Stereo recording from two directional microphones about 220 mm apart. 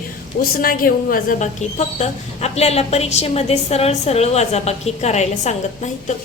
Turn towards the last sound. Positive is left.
turn(degrees=30)  # may be behind; listen again after turning